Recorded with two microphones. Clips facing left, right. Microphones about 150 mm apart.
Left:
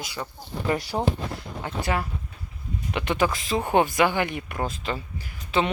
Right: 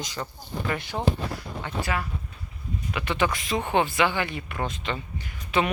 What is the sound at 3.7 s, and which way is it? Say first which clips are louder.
Speech: left 3 dB; 45° left (ahead or behind).